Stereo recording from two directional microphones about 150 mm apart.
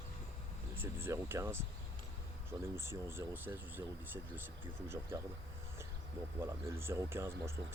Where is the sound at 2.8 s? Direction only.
15° right (ahead or behind).